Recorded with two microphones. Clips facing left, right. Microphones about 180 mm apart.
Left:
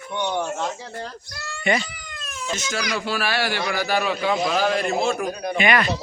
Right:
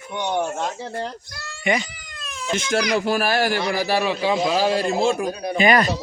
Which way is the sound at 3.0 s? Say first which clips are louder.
Right 4 dB; 45° right (ahead or behind).